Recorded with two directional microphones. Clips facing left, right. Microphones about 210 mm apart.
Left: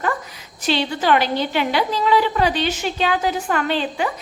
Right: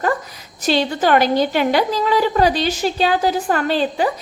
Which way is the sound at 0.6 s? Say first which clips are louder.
Right 3 dB; 40° right (ahead or behind).